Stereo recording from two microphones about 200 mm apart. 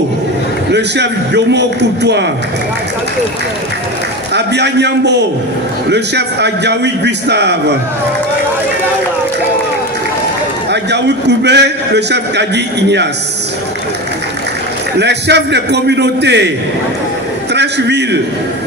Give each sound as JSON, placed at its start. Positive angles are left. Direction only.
{"t": 0.7, "sound": "a man's voice", "side_deg": -60}
{"t": 4.3, "sound": "a man's voice", "side_deg": -60}
{"t": 10.7, "sound": "a man's voice", "side_deg": -60}
{"t": 15.0, "sound": "a man's voice", "side_deg": -60}
{"t": 17.6, "sound": "a man's voice", "side_deg": -55}